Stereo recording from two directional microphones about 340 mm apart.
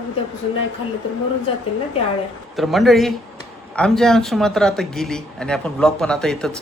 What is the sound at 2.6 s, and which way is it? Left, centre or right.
A man's voice, centre.